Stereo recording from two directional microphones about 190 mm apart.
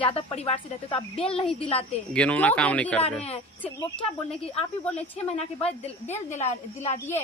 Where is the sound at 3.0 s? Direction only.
30° left (ahead or behind).